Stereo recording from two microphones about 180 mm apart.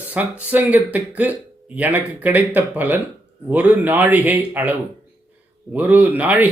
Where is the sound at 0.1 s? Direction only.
10° right (ahead or behind).